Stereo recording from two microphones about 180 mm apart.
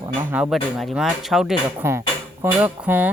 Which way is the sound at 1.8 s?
15° right (ahead or behind).